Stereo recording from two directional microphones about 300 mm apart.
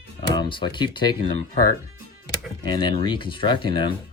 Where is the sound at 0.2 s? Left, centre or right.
Centre.